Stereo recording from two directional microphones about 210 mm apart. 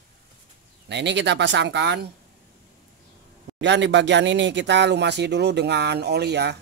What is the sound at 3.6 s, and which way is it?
Speech, 60° right (ahead or behind).